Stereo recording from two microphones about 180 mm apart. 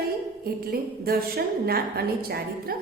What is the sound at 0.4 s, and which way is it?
A woman's voice, 55° right (ahead or behind).